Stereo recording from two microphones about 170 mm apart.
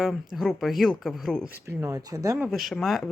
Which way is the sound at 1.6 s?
20° right (ahead or behind).